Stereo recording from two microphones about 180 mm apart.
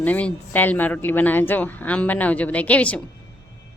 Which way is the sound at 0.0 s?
10° left (ahead or behind).